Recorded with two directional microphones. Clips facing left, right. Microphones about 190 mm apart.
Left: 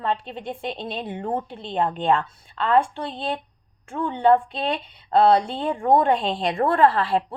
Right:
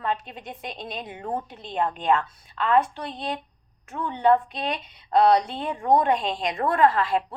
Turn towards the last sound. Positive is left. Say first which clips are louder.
# left 2 dB
turn(degrees=35)  # may be behind; listen again after turning